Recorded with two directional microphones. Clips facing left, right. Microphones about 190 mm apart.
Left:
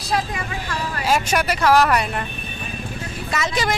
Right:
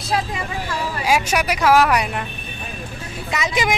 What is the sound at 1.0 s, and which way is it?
Speech, 10° right (ahead or behind).